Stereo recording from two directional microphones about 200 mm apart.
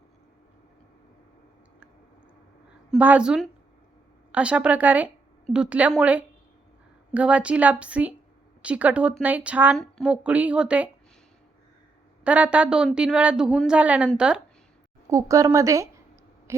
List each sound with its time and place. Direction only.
2.9 s a woman's voice: 5° right (ahead or behind)
12.2 s a woman's voice: 5° right (ahead or behind)
15.1 s speech: 15° right (ahead or behind)
16.5 s a sound: 15° right (ahead or behind)